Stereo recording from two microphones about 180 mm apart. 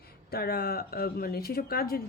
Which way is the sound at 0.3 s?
60° left (ahead or behind).